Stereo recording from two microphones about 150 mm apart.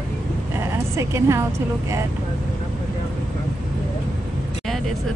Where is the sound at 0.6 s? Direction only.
20° right (ahead or behind).